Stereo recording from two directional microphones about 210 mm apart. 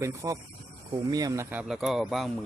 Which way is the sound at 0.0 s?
15° right (ahead or behind).